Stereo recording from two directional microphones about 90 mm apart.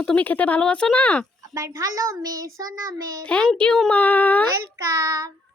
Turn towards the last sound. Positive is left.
turn(degrees=-35)  # may be behind; listen again after turning